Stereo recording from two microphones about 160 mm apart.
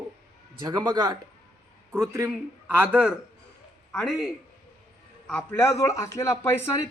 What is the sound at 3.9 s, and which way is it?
A man's voice, 5° left (ahead or behind).